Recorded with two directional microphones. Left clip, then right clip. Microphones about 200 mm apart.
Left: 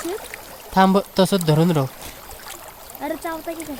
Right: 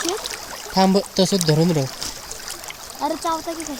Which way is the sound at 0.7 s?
50° left (ahead or behind).